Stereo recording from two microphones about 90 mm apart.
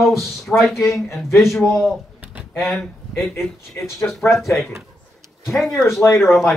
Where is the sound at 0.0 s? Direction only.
Centre (ahead or behind).